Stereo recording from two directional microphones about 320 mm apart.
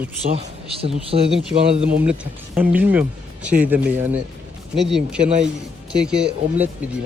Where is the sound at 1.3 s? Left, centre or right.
Centre.